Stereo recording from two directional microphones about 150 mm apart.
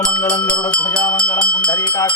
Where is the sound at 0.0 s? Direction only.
10° left (ahead or behind).